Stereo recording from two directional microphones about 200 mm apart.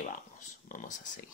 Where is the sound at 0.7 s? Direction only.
40° left (ahead or behind).